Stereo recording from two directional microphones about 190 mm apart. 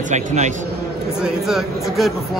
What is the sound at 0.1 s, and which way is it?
Speech, 40° right (ahead or behind).